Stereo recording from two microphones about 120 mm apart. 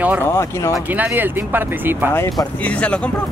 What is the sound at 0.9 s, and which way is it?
Speech, 15° right (ahead or behind).